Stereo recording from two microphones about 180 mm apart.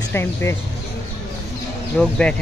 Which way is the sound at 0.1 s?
15° left (ahead or behind).